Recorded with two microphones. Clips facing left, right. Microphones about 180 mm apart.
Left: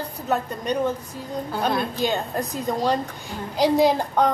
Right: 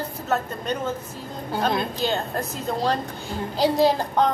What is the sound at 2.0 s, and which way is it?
A woman's voice, 15° left (ahead or behind).